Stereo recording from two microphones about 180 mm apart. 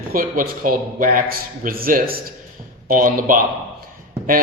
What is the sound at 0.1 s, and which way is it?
A man's voice, 50° right (ahead or behind).